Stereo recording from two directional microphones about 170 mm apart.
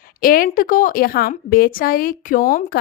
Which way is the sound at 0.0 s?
55° left (ahead or behind).